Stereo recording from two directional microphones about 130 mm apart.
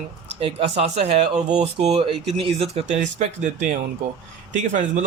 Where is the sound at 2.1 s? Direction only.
45° right (ahead or behind).